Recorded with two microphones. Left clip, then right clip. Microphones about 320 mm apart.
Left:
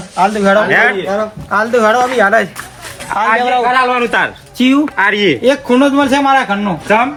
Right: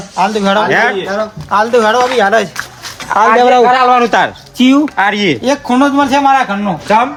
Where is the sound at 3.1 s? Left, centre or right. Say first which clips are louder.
Right 5 dB; right.